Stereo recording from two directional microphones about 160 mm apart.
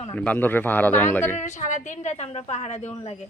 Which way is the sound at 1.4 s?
50° left (ahead or behind).